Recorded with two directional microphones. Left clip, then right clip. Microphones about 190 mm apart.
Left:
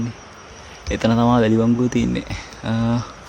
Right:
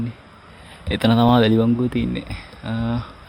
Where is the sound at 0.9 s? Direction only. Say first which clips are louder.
Right 1 dB; 50° right (ahead or behind).